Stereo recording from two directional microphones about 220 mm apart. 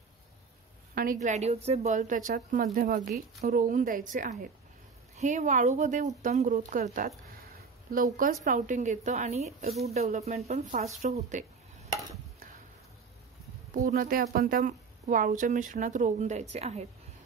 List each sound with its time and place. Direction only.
1.2 s a woman's voice: 30° right (ahead or behind)
13.7 s a woman's voice: 40° right (ahead or behind)